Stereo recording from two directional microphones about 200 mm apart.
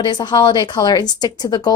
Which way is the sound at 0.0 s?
20° left (ahead or behind).